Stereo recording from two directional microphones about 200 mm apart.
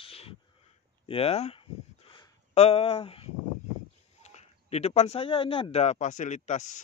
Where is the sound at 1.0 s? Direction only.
30° left (ahead or behind).